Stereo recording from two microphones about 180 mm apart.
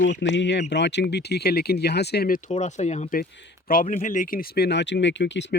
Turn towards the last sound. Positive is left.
turn(degrees=75)  # may be behind; listen again after turning